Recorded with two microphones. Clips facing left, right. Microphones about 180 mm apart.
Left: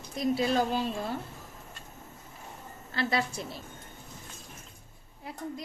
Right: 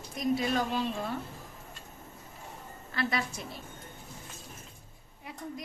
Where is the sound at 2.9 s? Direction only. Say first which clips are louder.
Left 3 dB; 30° left (ahead or behind).